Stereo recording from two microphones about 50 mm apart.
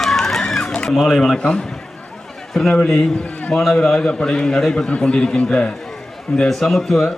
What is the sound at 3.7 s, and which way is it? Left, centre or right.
Speech, centre.